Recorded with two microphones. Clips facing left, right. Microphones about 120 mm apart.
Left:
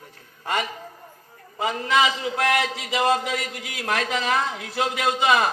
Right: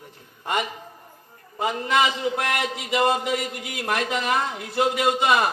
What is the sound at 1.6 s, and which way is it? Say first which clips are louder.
A man's voice: even; 10° right (ahead or behind).